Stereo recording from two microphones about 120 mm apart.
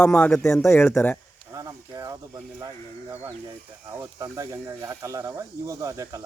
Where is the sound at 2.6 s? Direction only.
25° right (ahead or behind).